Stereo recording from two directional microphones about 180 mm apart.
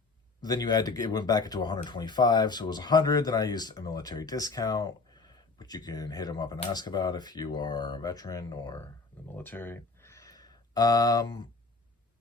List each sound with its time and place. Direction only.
0.4 s speech: 20° left (ahead or behind)
9.3 s speech: 10° left (ahead or behind)